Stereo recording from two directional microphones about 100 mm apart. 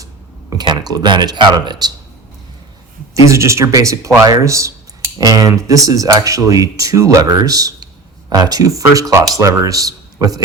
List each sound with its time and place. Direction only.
0.5 s speech: 45° right (ahead or behind)
3.2 s a man's voice: 30° right (ahead or behind)